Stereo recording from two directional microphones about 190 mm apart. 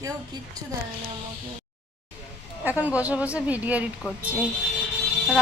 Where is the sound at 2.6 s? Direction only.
10° right (ahead or behind).